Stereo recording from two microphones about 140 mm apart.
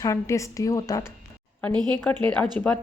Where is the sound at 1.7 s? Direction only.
30° right (ahead or behind).